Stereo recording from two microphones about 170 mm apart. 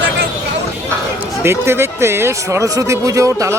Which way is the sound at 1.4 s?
15° right (ahead or behind).